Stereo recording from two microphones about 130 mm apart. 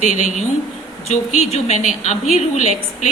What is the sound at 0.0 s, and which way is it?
A woman's voice, 70° left (ahead or behind).